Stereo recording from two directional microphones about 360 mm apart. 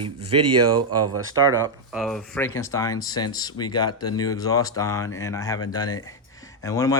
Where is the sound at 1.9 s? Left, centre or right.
Centre.